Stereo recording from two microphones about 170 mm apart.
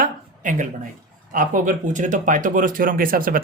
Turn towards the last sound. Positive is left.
turn(degrees=-55)  # may be behind; listen again after turning